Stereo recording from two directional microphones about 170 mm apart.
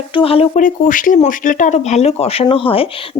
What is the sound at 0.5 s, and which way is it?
Speech, 50° left (ahead or behind).